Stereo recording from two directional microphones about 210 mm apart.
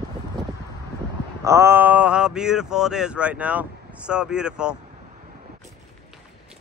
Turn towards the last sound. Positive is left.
turn(degrees=-5)  # may be behind; listen again after turning